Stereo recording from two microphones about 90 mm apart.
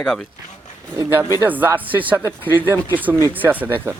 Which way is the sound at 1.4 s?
20° right (ahead or behind).